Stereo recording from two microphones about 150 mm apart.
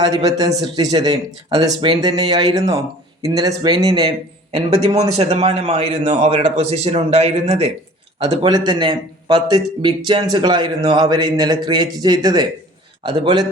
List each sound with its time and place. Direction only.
0.3 s a man's voice: 25° right (ahead or behind)
4.5 s a man's voice: 45° right (ahead or behind)
8.4 s a man's voice: 30° right (ahead or behind)